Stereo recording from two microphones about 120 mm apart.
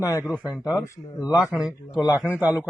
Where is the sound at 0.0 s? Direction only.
30° left (ahead or behind).